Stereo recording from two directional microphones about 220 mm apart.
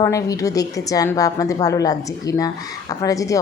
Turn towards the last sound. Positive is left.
turn(degrees=15)  # may be behind; listen again after turning